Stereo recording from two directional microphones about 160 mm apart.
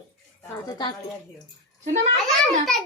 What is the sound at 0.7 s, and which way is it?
Speech, 30° left (ahead or behind).